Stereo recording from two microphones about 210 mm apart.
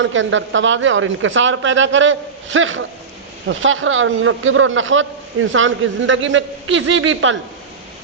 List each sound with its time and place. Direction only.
0.0 s speech: 65° right (ahead or behind)